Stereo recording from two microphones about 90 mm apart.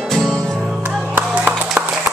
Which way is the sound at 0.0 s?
Centre (ahead or behind).